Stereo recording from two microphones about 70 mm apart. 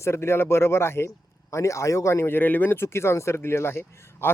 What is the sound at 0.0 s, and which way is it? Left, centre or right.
Speech, left.